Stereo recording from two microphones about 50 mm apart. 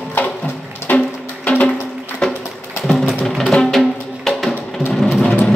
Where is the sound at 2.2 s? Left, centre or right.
Centre.